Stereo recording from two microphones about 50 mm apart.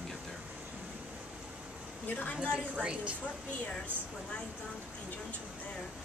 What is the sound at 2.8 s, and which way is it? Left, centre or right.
Speech, right.